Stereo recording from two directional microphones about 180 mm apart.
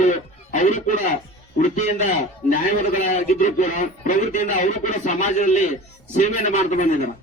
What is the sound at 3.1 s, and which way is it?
A man's voice, 40° left (ahead or behind).